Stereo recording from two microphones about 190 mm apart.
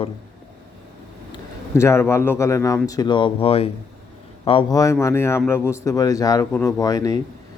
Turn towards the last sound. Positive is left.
turn(degrees=20)  # may be behind; listen again after turning